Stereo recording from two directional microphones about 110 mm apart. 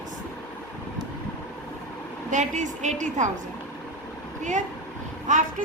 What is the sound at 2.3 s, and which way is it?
Speech, 90° right.